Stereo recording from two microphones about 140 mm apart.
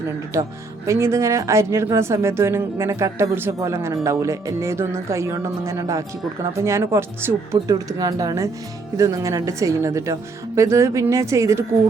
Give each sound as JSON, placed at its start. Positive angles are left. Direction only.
{"t": 0.3, "sound": "a woman's voice", "side_deg": -20}